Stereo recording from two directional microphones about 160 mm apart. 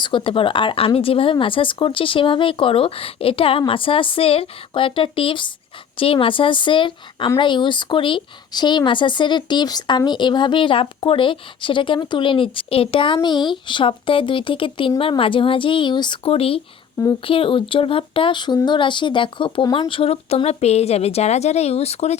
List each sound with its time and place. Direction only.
0.0 s speech: 30° left (ahead or behind)